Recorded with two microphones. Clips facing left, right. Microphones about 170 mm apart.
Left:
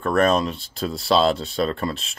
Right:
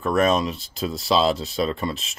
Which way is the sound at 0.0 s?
5° right (ahead or behind).